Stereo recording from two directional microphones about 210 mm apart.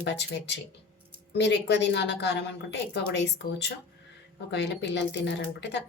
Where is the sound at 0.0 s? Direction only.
55° left (ahead or behind).